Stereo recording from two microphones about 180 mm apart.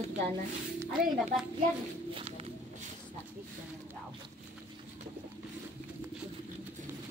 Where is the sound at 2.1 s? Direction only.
30° right (ahead or behind).